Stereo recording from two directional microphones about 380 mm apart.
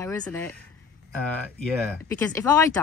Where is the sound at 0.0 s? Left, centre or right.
Centre.